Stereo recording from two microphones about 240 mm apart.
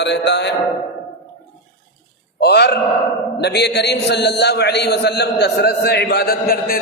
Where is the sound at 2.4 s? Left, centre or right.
Left.